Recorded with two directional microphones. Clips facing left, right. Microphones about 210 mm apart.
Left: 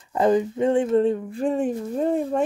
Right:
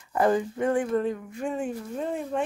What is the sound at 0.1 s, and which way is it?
Speech, 20° left (ahead or behind).